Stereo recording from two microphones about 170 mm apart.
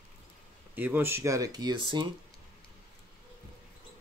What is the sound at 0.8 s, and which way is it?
Speech, 15° right (ahead or behind).